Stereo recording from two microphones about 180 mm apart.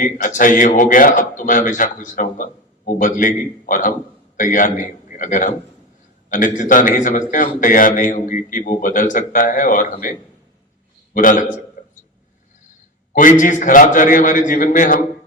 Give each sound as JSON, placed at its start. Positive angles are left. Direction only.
{"t": 0.0, "sound": "a man's voice", "side_deg": 45}
{"t": 6.6, "sound": "a man's voice", "side_deg": 45}
{"t": 11.8, "sound": "a sound", "side_deg": 45}
{"t": 13.1, "sound": "a man's voice", "side_deg": 45}